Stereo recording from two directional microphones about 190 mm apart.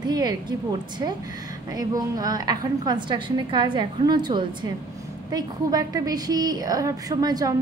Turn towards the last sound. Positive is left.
turn(degrees=-20)  # may be behind; listen again after turning